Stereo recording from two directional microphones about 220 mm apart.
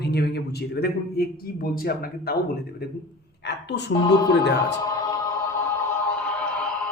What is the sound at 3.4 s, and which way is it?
Speech, 50° left (ahead or behind).